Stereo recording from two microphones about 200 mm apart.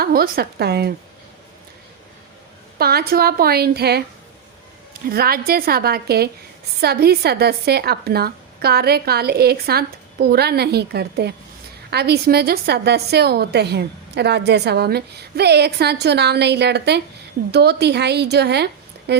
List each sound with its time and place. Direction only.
0.0 s speech: 50° right (ahead or behind)
2.7 s speech: 50° right (ahead or behind)
5.0 s a woman's voice: 50° right (ahead or behind)